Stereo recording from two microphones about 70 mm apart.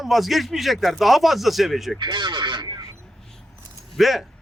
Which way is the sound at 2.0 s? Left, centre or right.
Right.